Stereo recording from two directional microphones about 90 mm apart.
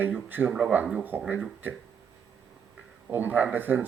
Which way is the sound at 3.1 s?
20° right (ahead or behind).